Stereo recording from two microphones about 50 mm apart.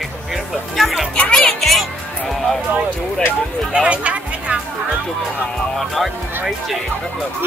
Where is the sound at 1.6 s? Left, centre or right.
Centre.